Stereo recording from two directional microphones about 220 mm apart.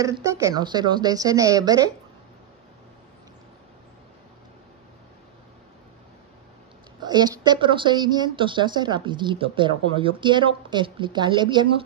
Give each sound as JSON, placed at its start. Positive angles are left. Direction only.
{"t": 0.0, "sound": "speech", "side_deg": -15}
{"t": 7.0, "sound": "speech", "side_deg": -20}